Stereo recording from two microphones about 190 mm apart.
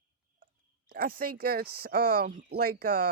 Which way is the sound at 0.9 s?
50° right (ahead or behind).